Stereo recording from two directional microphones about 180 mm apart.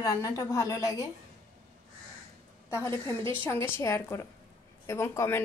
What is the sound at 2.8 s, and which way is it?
A woman's voice, 15° left (ahead or behind).